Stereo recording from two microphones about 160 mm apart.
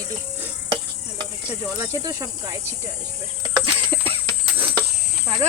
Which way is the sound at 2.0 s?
20° right (ahead or behind).